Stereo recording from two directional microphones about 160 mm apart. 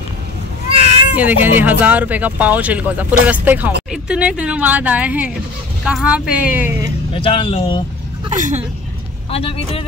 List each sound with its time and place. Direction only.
1.1 s speech: 10° right (ahead or behind)
7.2 s speech: 35° left (ahead or behind)
8.3 s speech: 50° right (ahead or behind)
9.3 s speech: 35° left (ahead or behind)